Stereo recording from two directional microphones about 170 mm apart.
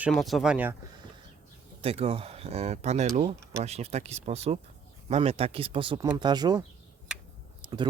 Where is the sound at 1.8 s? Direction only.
35° right (ahead or behind).